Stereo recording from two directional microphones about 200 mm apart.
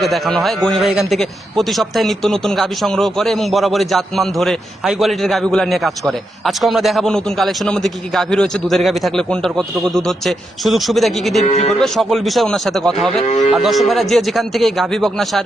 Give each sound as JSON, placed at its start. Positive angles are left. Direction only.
{"t": 0.0, "sound": "a man's voice", "side_deg": 0}
{"t": 11.4, "sound": "speech", "side_deg": 35}
{"t": 11.8, "sound": "a man's voice", "side_deg": 0}